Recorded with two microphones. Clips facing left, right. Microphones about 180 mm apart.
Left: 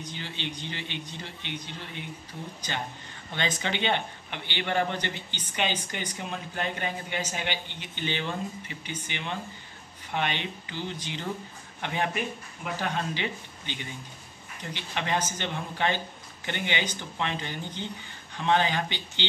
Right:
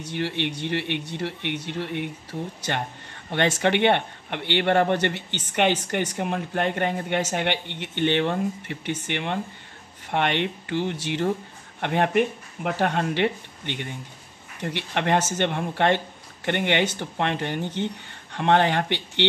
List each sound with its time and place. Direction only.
0.0 s a man's voice: 70° right (ahead or behind)